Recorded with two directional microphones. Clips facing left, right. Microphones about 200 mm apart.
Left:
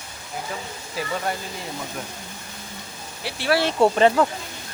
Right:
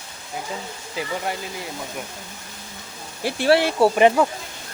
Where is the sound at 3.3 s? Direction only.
50° right (ahead or behind).